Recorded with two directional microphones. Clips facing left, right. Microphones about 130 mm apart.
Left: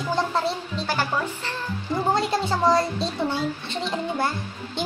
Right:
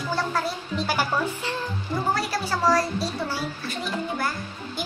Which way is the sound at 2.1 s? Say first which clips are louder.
Left 4 dB; 20° left (ahead or behind).